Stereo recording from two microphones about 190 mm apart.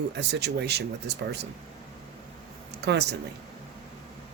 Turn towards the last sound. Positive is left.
turn(degrees=-60)  # may be behind; listen again after turning